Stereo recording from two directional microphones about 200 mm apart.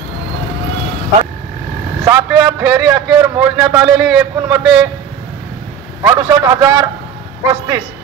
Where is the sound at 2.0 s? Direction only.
15° right (ahead or behind).